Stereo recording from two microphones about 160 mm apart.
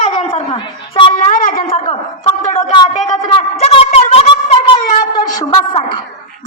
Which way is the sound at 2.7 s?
25° left (ahead or behind).